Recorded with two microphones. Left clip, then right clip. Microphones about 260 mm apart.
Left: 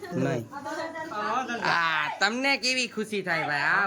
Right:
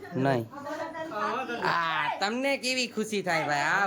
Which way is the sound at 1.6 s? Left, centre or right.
Centre.